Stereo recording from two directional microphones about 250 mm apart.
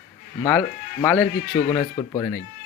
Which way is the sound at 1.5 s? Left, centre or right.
Centre.